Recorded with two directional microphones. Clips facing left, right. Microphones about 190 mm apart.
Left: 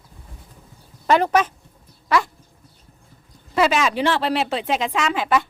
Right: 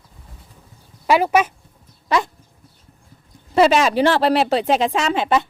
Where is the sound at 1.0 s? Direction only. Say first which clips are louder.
Right 1 dB; 10° right (ahead or behind).